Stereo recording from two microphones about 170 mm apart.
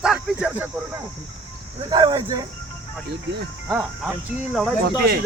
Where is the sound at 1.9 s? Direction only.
25° right (ahead or behind).